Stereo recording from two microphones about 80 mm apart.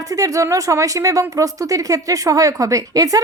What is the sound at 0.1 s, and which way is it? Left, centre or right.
A woman's voice, right.